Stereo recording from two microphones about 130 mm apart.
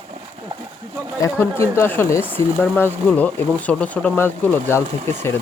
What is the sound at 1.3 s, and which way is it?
Speech, 15° left (ahead or behind).